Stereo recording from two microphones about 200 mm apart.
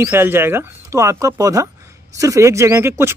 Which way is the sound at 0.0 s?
10° right (ahead or behind).